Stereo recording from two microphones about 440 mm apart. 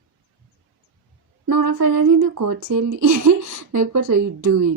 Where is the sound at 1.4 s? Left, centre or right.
Right.